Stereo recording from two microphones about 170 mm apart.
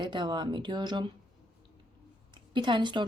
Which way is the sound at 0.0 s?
25° right (ahead or behind).